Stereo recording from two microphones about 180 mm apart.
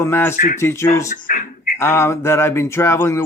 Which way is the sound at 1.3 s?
50° left (ahead or behind).